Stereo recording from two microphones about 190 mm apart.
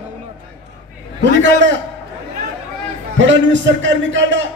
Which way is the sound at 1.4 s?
70° right (ahead or behind).